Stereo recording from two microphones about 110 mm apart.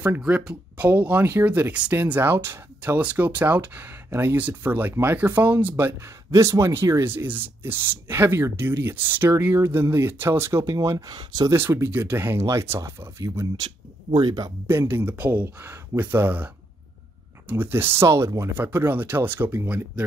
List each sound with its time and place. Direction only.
0.2 s speech: 10° right (ahead or behind); by 11.5 s 40° right (ahead or behind)
11.5 s speech: 20° right (ahead or behind)
14.1 s speech: 40° right (ahead or behind)
14.7 s speech: 20° right (ahead or behind)